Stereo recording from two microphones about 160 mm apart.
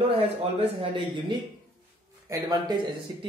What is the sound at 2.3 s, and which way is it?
Speech, 25° right (ahead or behind).